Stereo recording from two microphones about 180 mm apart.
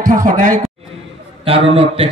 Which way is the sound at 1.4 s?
30° right (ahead or behind).